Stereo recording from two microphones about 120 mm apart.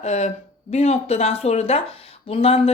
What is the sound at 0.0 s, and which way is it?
Speech, 70° left (ahead or behind).